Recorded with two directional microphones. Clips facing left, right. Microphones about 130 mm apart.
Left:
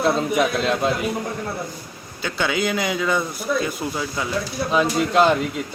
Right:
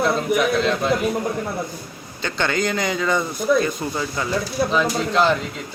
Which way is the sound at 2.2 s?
5° left (ahead or behind).